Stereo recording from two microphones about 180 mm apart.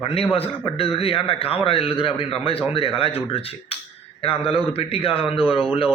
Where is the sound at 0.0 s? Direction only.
30° left (ahead or behind).